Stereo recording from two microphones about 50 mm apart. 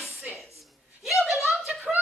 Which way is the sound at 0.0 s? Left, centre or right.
Centre.